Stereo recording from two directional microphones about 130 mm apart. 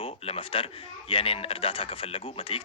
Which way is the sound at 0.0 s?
50° left (ahead or behind).